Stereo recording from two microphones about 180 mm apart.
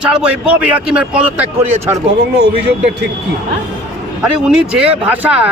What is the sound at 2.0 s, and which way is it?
Speech, 65° right (ahead or behind).